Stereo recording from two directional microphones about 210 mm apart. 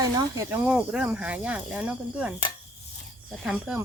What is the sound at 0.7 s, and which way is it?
Speech, 5° right (ahead or behind).